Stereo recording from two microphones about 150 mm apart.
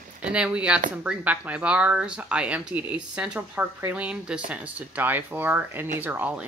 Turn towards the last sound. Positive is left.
turn(degrees=-10)  # may be behind; listen again after turning